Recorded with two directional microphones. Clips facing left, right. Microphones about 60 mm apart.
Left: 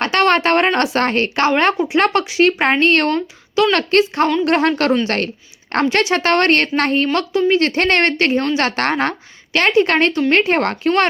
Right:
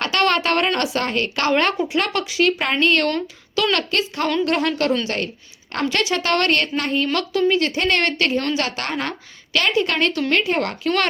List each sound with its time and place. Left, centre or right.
0.0 s speech: left
1.5 s speech: left
3.1 s speech: left
3.7 s speech: left
5.0 s a woman's voice: left
5.9 s speech: left
7.1 s speech: left
7.6 s speech: left
8.5 s a woman's voice: left